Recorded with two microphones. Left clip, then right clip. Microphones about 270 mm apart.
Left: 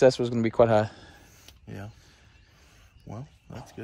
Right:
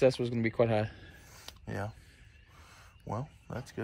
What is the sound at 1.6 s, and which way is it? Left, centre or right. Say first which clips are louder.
Speech: right 5 dB; centre.